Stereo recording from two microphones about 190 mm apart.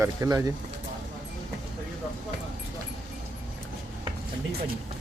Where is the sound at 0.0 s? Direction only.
15° right (ahead or behind).